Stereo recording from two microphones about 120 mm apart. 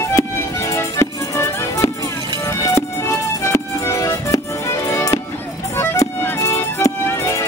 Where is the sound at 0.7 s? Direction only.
25° left (ahead or behind).